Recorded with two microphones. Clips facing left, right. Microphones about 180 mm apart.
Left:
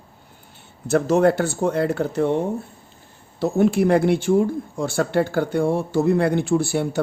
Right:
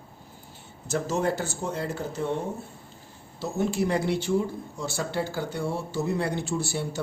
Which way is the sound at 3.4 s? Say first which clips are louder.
Left 9 dB; 60° left (ahead or behind).